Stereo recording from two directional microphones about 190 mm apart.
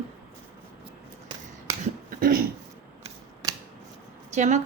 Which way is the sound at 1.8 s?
50° right (ahead or behind).